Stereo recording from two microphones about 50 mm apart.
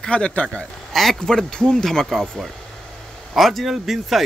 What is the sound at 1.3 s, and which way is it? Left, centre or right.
Speech, centre.